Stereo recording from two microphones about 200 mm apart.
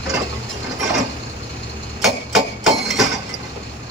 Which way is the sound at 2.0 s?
Centre (ahead or behind).